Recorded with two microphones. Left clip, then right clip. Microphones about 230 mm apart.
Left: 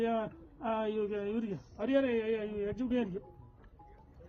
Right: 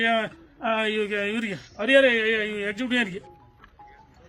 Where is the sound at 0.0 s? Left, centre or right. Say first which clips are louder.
Right 10 dB; right.